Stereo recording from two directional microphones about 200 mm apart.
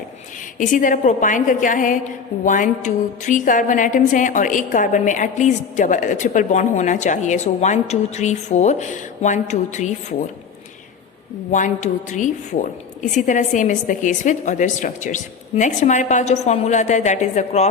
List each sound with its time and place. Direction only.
0.6 s a woman's voice: 40° left (ahead or behind)
11.5 s a woman's voice: 40° left (ahead or behind)